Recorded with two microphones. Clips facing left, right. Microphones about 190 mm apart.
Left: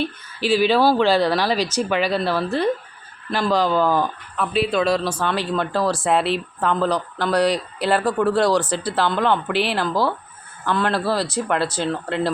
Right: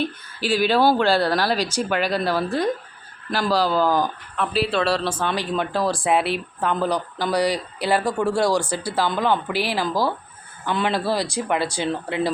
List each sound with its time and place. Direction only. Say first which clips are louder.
0.7 s speech: right 1 dB; 15° right (ahead or behind); by 5.0 s centre (ahead or behind)
5.1 s speech: left 1 dB; 10° right (ahead or behind)